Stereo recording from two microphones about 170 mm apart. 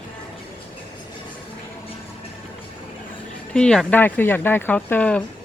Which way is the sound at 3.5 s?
5° left (ahead or behind).